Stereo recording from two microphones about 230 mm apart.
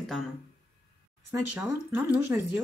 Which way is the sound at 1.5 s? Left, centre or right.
Centre.